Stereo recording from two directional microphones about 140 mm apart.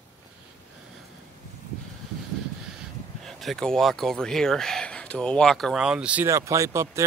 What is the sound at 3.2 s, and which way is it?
Speech, centre (ahead or behind).